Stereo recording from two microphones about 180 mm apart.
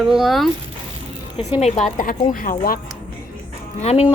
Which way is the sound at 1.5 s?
35° left (ahead or behind).